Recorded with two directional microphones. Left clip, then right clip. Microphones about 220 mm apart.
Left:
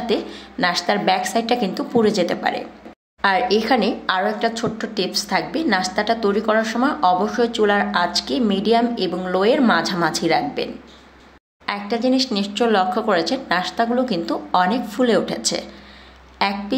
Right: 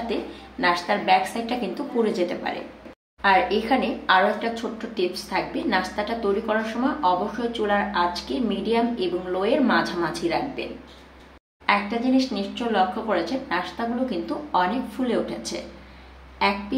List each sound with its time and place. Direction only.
0.1 s a woman's voice: 50° left (ahead or behind)
11.6 s a woman's voice: 50° left (ahead or behind)